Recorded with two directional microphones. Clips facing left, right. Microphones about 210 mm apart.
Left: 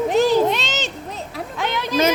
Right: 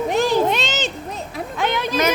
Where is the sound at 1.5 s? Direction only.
50° right (ahead or behind).